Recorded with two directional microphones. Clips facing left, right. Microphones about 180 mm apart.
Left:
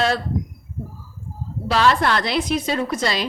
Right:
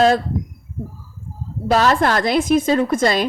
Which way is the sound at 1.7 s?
45° right (ahead or behind).